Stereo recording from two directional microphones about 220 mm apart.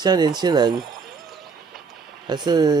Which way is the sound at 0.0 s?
20° right (ahead or behind).